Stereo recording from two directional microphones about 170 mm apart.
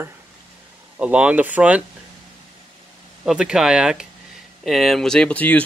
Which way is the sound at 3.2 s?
5° right (ahead or behind).